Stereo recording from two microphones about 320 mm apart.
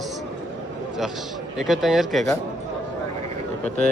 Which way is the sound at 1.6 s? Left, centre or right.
Centre.